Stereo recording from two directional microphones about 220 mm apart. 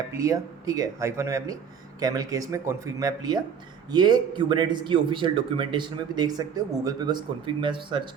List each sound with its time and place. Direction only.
0.2 s a man's voice: 15° right (ahead or behind)